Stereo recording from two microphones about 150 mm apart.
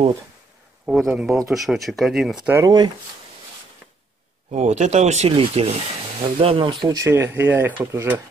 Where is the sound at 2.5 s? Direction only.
20° right (ahead or behind).